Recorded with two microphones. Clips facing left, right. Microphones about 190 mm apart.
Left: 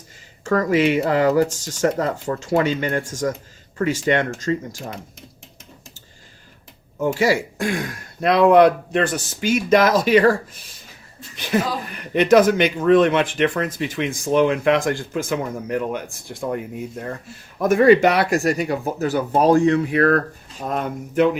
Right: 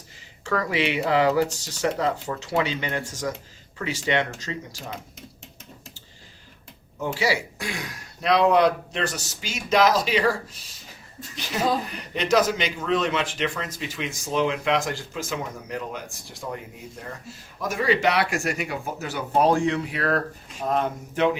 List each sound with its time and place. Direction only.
0.4 s speech: 45° left (ahead or behind)
7.0 s speech: 50° left (ahead or behind)
12.1 s speech: 55° left (ahead or behind)
17.6 s speech: 55° left (ahead or behind)